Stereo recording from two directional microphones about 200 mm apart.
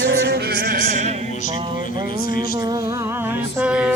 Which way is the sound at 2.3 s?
20° right (ahead or behind).